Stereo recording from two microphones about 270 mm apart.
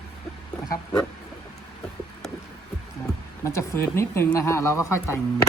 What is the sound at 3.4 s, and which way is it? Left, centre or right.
Speech, centre.